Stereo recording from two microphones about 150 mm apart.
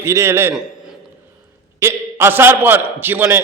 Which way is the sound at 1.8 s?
15° right (ahead or behind).